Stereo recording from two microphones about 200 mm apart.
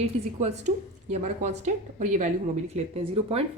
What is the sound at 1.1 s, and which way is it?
A woman's voice, 35° right (ahead or behind).